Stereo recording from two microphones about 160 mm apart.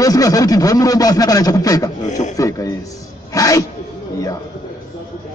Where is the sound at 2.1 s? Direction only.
50° left (ahead or behind).